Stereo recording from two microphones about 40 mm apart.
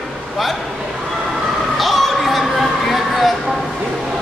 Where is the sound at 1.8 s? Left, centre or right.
Centre.